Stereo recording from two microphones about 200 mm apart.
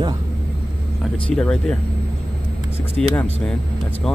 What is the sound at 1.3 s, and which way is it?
Speech, 5° left (ahead or behind).